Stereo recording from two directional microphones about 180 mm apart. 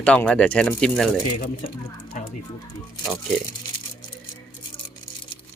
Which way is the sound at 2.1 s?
45° left (ahead or behind).